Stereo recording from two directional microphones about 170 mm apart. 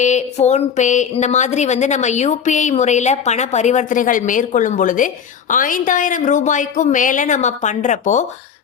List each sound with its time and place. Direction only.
0.0 s a woman's voice: 45° left (ahead or behind)